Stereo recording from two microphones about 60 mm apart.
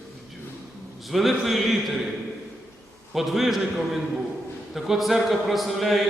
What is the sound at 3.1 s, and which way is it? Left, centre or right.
Speech, centre.